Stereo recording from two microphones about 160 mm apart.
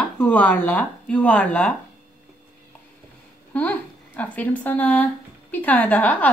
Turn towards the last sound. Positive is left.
turn(degrees=10)  # may be behind; listen again after turning